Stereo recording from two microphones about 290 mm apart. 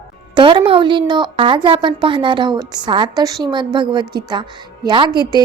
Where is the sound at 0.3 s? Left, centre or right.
Centre.